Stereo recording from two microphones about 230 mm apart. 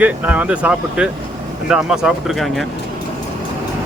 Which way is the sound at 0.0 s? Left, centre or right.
Centre.